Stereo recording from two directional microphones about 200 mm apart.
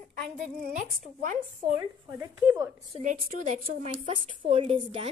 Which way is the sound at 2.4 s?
10° right (ahead or behind).